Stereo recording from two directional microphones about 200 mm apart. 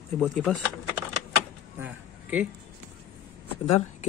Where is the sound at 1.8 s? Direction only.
10° right (ahead or behind).